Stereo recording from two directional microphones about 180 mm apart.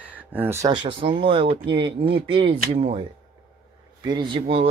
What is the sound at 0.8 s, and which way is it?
Speech, 30° right (ahead or behind).